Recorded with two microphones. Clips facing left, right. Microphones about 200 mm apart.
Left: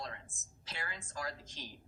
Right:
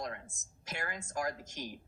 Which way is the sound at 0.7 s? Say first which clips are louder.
Right 6 dB; 50° right (ahead or behind).